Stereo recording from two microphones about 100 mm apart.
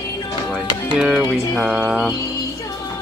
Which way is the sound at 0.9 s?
10° right (ahead or behind).